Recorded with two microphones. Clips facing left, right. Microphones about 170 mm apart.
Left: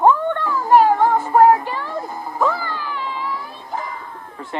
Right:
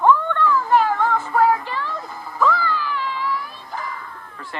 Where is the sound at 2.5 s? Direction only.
45° left (ahead or behind).